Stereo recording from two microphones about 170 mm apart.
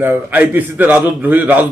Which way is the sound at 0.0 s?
10° right (ahead or behind).